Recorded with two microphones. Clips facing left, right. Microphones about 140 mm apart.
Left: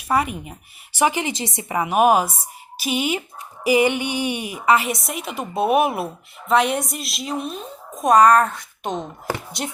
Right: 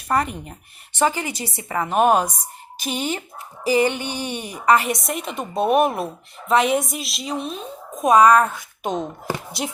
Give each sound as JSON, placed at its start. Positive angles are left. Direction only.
{"t": 0.1, "sound": "a woman's voice", "side_deg": 5}
{"t": 0.9, "sound": "a woman's voice", "side_deg": 15}